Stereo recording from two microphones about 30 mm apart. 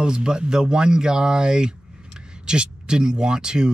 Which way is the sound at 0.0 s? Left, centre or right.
Right.